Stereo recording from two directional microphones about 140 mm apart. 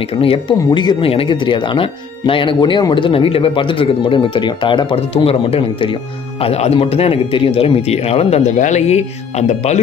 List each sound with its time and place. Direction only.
0.1 s speech: 40° left (ahead or behind)